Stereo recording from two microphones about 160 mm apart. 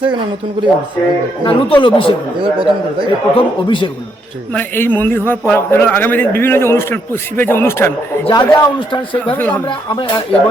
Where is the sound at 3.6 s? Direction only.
30° left (ahead or behind).